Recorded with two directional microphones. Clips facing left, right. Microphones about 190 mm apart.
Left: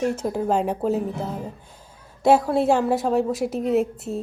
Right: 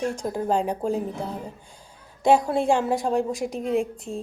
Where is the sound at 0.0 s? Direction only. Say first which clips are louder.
Left 3 dB; 5° left (ahead or behind).